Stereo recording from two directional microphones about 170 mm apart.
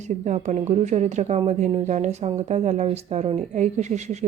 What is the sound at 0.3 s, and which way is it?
A woman's voice, 45° right (ahead or behind).